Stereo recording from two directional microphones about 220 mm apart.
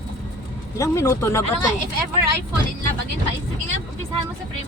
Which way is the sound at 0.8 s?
15° left (ahead or behind).